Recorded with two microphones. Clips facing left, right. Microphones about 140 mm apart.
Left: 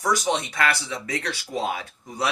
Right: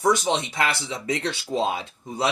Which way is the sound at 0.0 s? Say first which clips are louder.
Right 2 dB; 25° right (ahead or behind).